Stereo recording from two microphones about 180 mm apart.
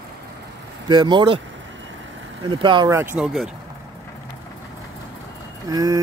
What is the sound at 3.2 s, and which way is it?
Speech, centre (ahead or behind).